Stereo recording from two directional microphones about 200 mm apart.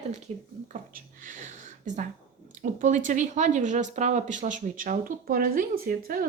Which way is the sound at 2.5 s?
40° right (ahead or behind).